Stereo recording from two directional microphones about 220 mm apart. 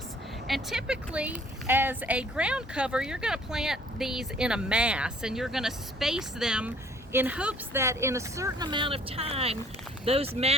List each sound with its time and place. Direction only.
0.4 s a woman's voice: centre (ahead or behind); by 10.5 s 25° right (ahead or behind)